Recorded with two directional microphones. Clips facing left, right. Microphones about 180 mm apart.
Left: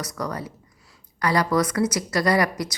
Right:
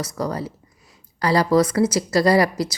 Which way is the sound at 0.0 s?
30° right (ahead or behind).